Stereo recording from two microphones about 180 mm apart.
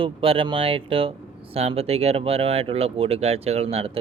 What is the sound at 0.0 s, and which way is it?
Speech, 30° right (ahead or behind).